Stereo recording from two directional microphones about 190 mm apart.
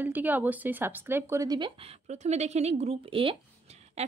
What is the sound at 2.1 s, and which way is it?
A woman's voice, 35° right (ahead or behind).